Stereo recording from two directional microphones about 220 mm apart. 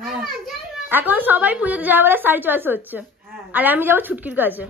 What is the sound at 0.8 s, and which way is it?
A woman's voice, 10° right (ahead or behind).